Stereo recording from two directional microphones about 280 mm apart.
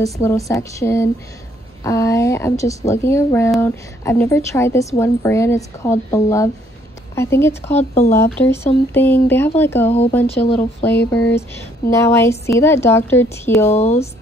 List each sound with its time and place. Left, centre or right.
0.0 s speech: centre
13.7 s speech: left